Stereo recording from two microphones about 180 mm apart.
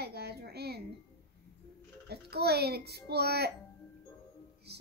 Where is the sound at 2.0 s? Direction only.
65° right (ahead or behind).